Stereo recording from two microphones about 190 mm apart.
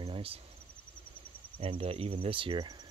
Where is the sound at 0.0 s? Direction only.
30° right (ahead or behind).